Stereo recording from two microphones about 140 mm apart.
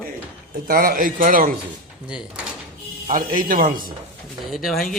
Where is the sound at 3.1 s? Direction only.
75° right (ahead or behind).